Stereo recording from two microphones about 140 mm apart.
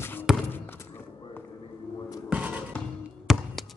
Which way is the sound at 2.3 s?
10° right (ahead or behind).